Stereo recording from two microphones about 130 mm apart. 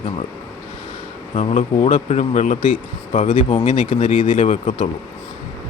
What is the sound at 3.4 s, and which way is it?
Speech, 50° left (ahead or behind).